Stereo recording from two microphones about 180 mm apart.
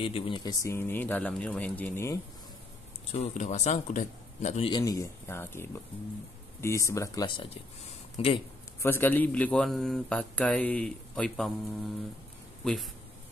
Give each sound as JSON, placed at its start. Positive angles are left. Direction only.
{"t": 0.0, "sound": "a man's voice", "side_deg": 30}
{"t": 3.1, "sound": "speech", "side_deg": 40}
{"t": 4.6, "sound": "a man's voice", "side_deg": 20}
{"t": 8.8, "sound": "a man's voice", "side_deg": 10}
{"t": 12.6, "sound": "speech", "side_deg": 0}